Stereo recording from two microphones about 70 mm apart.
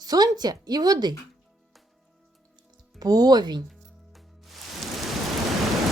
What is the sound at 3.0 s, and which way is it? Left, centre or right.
Speech, right.